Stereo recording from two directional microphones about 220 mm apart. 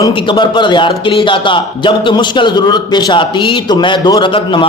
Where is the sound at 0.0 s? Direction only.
20° left (ahead or behind).